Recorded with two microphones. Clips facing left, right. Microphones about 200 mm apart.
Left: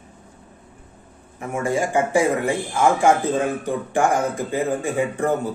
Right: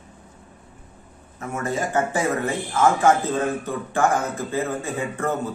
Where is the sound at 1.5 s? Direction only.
15° left (ahead or behind).